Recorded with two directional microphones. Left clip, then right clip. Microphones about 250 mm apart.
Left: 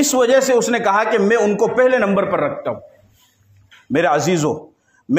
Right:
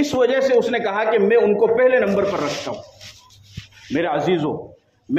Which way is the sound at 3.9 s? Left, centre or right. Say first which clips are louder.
Left 4 dB; left.